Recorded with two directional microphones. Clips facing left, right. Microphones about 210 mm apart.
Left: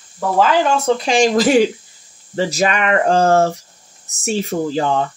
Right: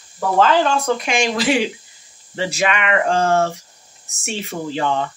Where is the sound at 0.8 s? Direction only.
35° left (ahead or behind).